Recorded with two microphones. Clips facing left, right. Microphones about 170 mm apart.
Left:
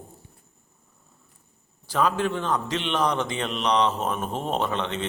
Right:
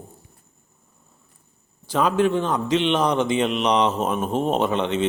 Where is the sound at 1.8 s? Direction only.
20° right (ahead or behind).